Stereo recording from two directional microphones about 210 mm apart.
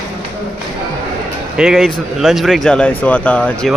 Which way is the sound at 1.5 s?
5° right (ahead or behind).